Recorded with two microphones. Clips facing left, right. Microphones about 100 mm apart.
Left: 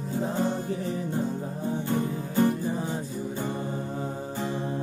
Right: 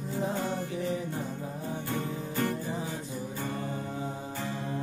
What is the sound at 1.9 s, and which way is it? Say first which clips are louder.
Music: left 6 dB; 25° left (ahead or behind).